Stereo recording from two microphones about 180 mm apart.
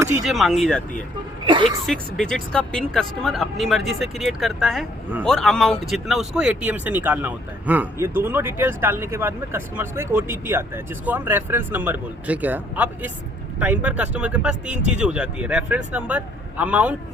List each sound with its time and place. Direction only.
0.3 s speech: centre (ahead or behind)
1.5 s speech: 25° right (ahead or behind)
1.9 s speech: 5° left (ahead or behind)